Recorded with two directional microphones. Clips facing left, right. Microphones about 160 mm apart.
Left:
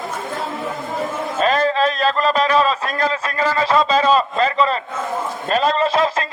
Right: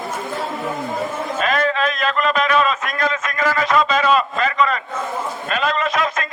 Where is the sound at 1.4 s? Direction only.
35° left (ahead or behind).